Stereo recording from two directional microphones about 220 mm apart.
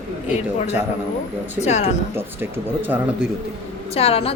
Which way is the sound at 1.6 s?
30° left (ahead or behind).